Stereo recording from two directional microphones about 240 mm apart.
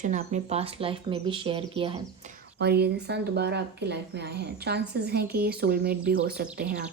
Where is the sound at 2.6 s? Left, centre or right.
Right.